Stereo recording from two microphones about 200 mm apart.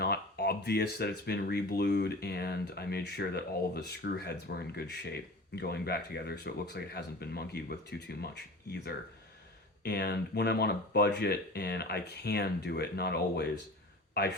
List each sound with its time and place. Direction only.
0.0 s speech: 55° left (ahead or behind)